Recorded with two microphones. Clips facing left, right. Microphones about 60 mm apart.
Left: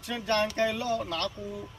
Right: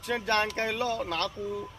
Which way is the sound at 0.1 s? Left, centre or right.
Right.